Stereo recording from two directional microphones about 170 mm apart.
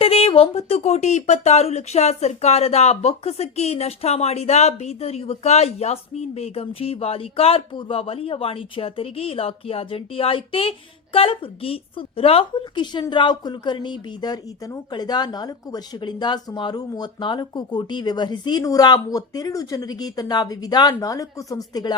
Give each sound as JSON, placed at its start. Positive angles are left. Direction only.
{"t": 0.0, "sound": "speech", "side_deg": 35}